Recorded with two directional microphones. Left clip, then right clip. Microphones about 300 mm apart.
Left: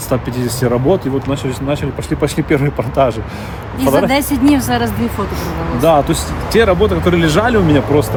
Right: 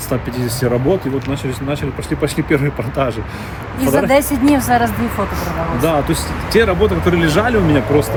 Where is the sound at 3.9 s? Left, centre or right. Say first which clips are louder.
Even; centre.